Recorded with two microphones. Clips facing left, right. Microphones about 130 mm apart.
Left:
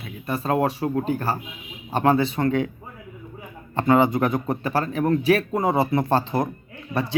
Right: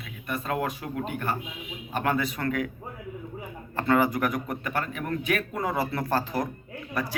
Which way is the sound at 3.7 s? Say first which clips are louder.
Left 5 dB; 20° left (ahead or behind).